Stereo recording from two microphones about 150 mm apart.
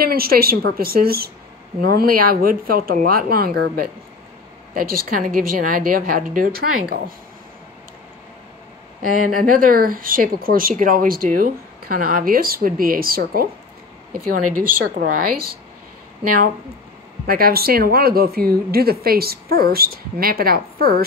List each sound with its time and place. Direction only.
0.0 s a woman's voice: 90° right
9.0 s speech: 65° right (ahead or behind)
17.3 s a woman's voice: 85° right